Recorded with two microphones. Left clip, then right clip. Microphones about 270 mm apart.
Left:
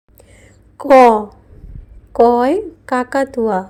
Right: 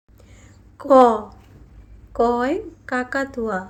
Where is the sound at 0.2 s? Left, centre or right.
Centre.